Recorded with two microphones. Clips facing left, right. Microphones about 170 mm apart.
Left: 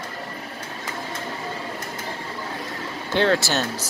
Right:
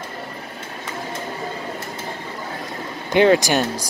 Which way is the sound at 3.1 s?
15° right (ahead or behind).